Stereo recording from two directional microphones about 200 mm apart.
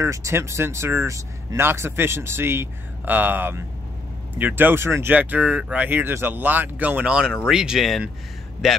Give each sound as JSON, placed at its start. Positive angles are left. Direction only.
{"t": 0.0, "sound": "speech", "side_deg": -15}